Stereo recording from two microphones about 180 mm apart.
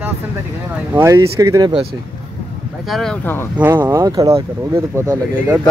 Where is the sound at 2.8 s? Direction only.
Centre (ahead or behind).